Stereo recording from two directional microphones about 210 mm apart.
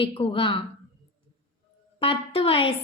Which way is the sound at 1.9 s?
25° left (ahead or behind).